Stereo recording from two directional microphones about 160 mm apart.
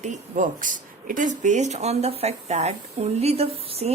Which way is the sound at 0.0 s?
50° right (ahead or behind).